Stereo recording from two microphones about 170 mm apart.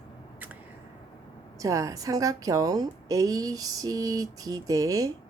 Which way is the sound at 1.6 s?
20° right (ahead or behind).